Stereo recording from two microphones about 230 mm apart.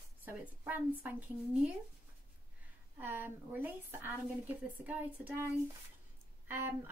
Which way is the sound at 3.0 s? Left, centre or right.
Centre.